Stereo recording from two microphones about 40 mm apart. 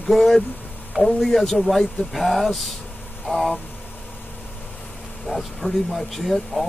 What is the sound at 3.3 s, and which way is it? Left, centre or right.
Speech, centre.